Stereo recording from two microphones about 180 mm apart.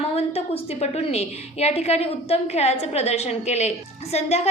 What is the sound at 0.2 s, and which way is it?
A woman's voice, 35° left (ahead or behind).